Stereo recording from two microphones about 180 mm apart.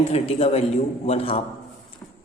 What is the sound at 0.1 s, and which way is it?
A man's voice, 35° left (ahead or behind).